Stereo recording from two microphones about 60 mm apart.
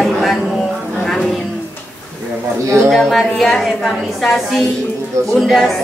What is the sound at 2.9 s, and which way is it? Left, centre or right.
A woman's voice, centre.